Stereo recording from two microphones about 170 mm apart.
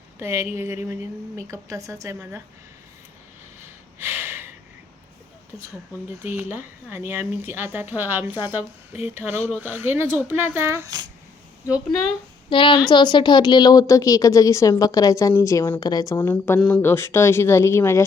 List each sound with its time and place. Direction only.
0.2 s speech: 15° right (ahead or behind)
3.6 s a sound: 15° right (ahead or behind)
6.2 s speech: 10° right (ahead or behind)
12.5 s a woman's voice: 30° left (ahead or behind)
16.1 s speech: 10° left (ahead or behind)